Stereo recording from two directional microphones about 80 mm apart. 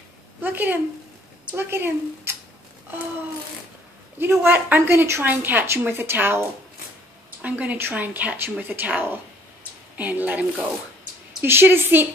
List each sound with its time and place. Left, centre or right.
0.4 s a woman's voice: right
4.2 s speech: right
7.4 s speech: centre
11.4 s speech: right